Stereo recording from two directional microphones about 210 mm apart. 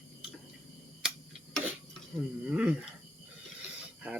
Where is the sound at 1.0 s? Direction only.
5° right (ahead or behind).